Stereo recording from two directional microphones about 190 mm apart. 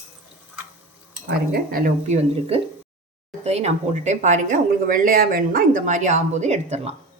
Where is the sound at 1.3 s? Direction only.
50° right (ahead or behind).